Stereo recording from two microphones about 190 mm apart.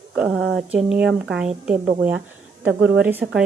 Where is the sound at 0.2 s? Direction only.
Centre (ahead or behind).